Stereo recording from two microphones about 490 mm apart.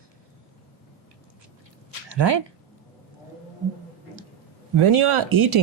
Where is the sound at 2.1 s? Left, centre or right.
Right.